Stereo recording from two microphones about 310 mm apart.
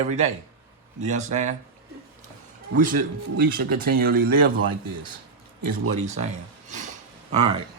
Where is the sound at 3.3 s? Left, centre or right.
Right.